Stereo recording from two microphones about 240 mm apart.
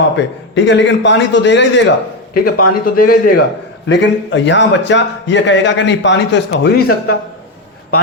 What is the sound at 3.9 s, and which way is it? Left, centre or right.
A man's voice, left.